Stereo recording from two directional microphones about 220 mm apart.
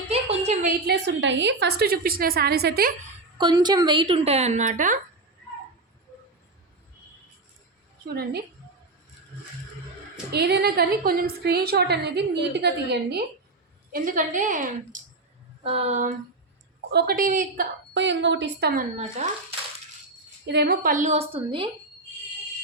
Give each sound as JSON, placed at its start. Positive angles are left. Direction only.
{"t": 0.1, "sound": "a sound", "side_deg": -30}
{"t": 0.9, "sound": "a woman's voice", "side_deg": -50}
{"t": 3.3, "sound": "a woman's voice", "side_deg": -20}
{"t": 8.0, "sound": "a woman's voice", "side_deg": -45}
{"t": 10.3, "sound": "a woman's voice", "side_deg": -50}
{"t": 13.9, "sound": "a woman's voice", "side_deg": -40}
{"t": 16.9, "sound": "a woman's voice", "side_deg": -45}
{"t": 17.9, "sound": "a woman's voice", "side_deg": -55}
{"t": 20.5, "sound": "a woman's voice", "side_deg": -45}